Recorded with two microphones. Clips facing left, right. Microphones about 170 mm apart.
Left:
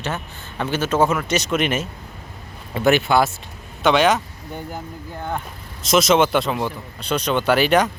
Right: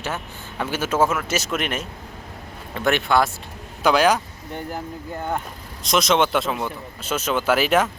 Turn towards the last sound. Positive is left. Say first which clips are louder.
# left 2 dB
turn(degrees=0)  # may be behind; listen again after turning